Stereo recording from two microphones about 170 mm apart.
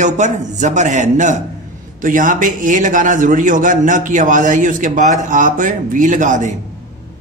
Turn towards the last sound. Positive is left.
turn(degrees=-45)  # may be behind; listen again after turning